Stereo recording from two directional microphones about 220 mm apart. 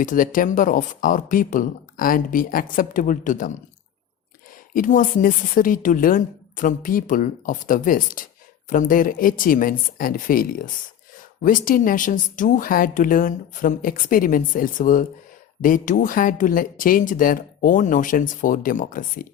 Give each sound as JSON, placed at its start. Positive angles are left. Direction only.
{"t": 0.0, "sound": "speech", "side_deg": 40}
{"t": 4.7, "sound": "speech", "side_deg": 40}